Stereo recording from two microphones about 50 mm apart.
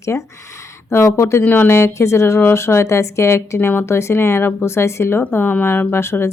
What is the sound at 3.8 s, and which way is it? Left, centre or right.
Speech, left.